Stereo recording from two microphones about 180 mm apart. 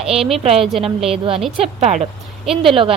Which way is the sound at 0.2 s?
Centre (ahead or behind).